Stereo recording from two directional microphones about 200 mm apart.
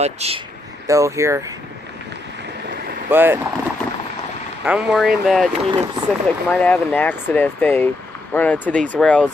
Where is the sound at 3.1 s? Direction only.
10° right (ahead or behind).